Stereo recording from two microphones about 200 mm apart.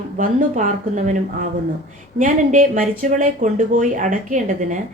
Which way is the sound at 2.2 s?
40° right (ahead or behind).